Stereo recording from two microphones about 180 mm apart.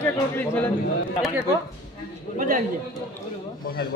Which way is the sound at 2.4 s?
50° right (ahead or behind).